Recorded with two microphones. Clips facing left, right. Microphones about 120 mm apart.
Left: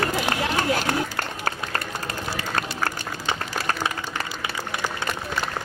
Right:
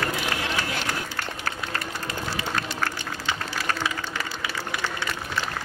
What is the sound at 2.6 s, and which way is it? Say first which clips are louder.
Applause: left 2 dB; 45° left (ahead or behind).